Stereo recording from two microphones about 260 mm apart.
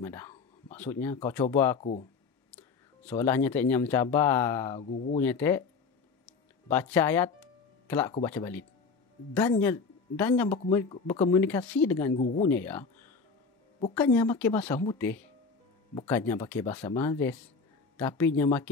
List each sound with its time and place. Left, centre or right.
0.0 s speech: centre
1.8 s speech: left
2.5 s speech: centre
6.7 s speech: centre